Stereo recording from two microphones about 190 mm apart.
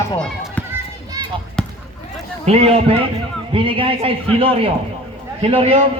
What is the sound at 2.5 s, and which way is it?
A man's voice, 35° right (ahead or behind).